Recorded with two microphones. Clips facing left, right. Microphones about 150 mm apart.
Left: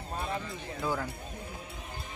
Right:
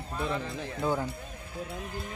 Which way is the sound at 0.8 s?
25° right (ahead or behind).